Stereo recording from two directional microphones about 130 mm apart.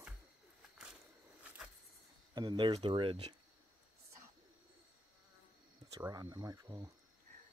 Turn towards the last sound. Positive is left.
turn(degrees=-25)  # may be behind; listen again after turning